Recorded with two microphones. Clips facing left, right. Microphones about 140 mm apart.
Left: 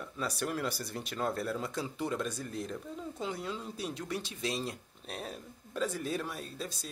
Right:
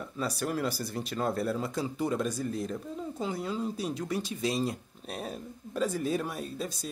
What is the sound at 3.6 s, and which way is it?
Speech, 40° right (ahead or behind).